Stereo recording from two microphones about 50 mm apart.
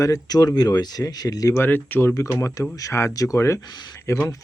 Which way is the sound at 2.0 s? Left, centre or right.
Left.